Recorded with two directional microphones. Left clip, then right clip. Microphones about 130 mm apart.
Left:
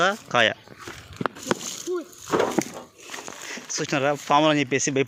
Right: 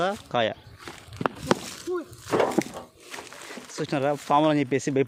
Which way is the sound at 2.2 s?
45° left (ahead or behind).